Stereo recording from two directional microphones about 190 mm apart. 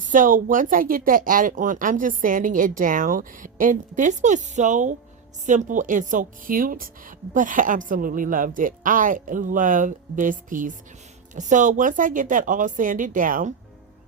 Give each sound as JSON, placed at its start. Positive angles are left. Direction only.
{"t": 0.1, "sound": "speech", "side_deg": -45}